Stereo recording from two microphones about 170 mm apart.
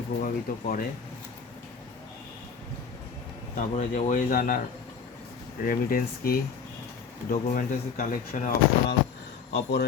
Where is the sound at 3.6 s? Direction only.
45° left (ahead or behind).